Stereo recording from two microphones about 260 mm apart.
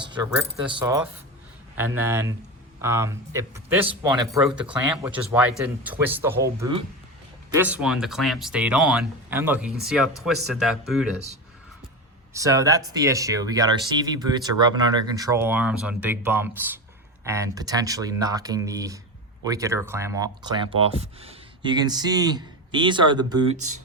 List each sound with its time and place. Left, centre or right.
0.0 s coin: centre
0.7 s speech: centre
12.3 s speech: centre